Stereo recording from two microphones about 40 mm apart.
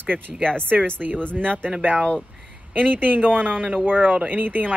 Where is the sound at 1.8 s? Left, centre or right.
Right.